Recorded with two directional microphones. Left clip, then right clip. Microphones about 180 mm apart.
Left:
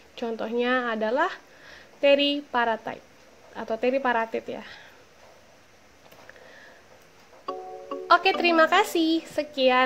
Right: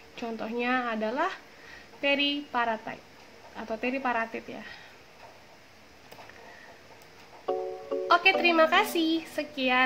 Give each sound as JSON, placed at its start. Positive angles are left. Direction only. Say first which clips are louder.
{"t": 0.1, "sound": "speech", "louder": "left 5 dB", "side_deg": 40}
{"t": 8.1, "sound": "speech", "louder": "left 2 dB", "side_deg": 45}